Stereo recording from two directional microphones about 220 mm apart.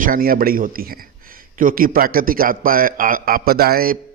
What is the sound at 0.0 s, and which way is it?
Speech, 40° right (ahead or behind).